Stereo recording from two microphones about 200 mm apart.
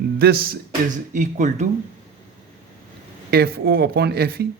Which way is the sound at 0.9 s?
40° right (ahead or behind).